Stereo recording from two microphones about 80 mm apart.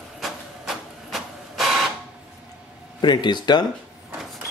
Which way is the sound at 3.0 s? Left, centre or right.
Left.